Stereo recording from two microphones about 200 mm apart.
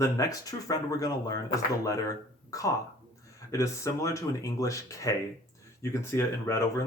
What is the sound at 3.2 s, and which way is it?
Speech, 15° left (ahead or behind).